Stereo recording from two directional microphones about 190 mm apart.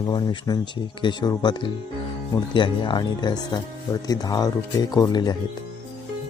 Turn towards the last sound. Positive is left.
turn(degrees=20)  # may be behind; listen again after turning